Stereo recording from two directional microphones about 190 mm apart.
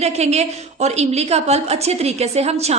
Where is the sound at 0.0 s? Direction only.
35° right (ahead or behind).